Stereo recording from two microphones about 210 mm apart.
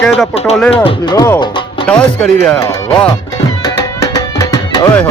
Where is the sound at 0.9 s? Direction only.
20° left (ahead or behind).